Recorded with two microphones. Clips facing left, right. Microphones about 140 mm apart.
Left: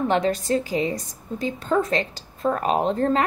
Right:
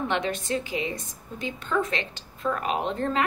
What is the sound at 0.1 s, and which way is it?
A woman's voice, 35° left (ahead or behind).